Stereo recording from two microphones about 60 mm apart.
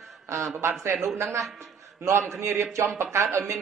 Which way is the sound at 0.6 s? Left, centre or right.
Right.